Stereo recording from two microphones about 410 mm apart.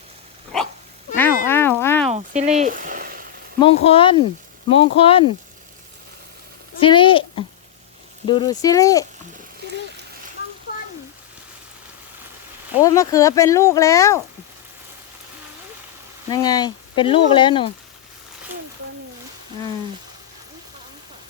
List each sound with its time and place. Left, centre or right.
1.5 s a sound: centre
2.1 s frying: centre
3.6 s speech: centre
6.7 s a child's voice: centre
12.8 s speech: centre
16.3 s speech: centre